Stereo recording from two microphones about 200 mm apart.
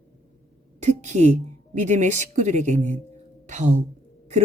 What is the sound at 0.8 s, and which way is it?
A woman's voice, 35° right (ahead or behind).